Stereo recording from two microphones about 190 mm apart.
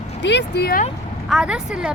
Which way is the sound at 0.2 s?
65° left (ahead or behind).